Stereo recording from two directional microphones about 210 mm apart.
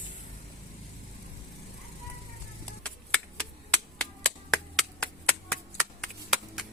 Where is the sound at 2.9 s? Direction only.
5° left (ahead or behind).